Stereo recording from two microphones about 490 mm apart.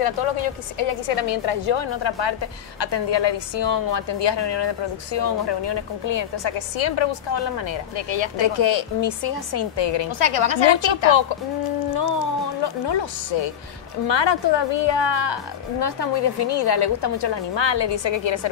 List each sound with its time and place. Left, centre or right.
0.0 s a woman's voice: left
12.6 s a woman's voice: left